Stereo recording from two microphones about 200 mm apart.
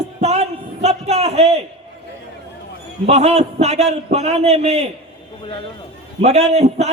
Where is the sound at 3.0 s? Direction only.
35° right (ahead or behind).